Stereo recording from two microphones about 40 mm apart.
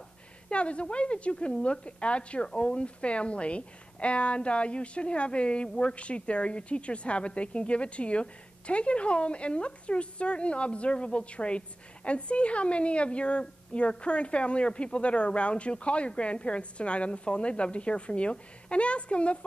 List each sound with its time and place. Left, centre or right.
0.5 s a woman's voice: left